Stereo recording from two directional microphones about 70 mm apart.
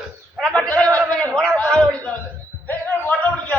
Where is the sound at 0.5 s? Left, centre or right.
Centre.